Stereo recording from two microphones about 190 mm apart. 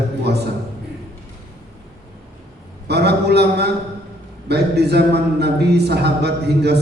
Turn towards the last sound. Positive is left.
turn(degrees=-60)  # may be behind; listen again after turning